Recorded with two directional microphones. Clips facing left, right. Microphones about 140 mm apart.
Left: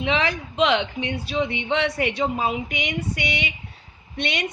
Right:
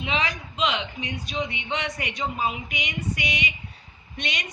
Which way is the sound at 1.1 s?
30° left (ahead or behind).